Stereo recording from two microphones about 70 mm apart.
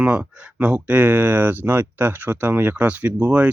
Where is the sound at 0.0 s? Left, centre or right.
Centre.